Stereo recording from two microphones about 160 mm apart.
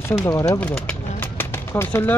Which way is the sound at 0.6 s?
5° left (ahead or behind).